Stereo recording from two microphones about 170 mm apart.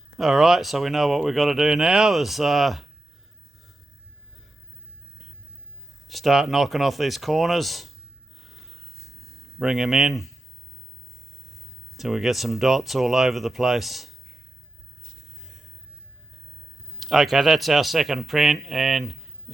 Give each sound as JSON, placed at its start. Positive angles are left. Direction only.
{"t": 0.2, "sound": "speech", "side_deg": 0}
{"t": 6.1, "sound": "speech", "side_deg": 0}
{"t": 8.4, "sound": "snort", "side_deg": 0}
{"t": 9.6, "sound": "speech", "side_deg": 0}
{"t": 11.9, "sound": "speech", "side_deg": 0}
{"t": 17.0, "sound": "speech", "side_deg": 0}